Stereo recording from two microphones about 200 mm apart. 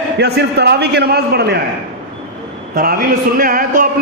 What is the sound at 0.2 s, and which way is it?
A man's voice, 55° right (ahead or behind).